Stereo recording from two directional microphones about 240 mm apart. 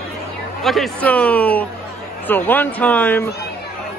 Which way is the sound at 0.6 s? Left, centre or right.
Centre.